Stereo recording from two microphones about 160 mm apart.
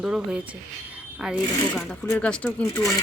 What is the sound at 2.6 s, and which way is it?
Speech, 20° left (ahead or behind).